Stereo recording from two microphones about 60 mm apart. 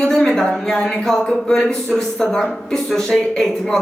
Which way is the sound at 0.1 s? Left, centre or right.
Centre.